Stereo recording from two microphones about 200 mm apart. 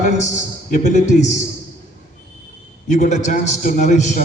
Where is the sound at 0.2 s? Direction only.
35° left (ahead or behind).